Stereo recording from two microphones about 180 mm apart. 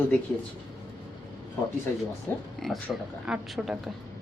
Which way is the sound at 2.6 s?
Centre (ahead or behind).